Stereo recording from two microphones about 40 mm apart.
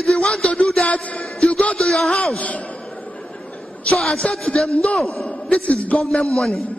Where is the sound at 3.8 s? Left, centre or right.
Left.